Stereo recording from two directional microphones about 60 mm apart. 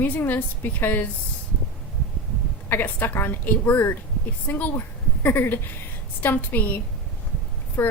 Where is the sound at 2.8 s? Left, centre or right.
Left.